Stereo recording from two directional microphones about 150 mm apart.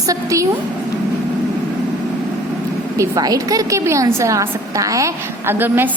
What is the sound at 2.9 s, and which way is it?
A woman's voice, 25° right (ahead or behind).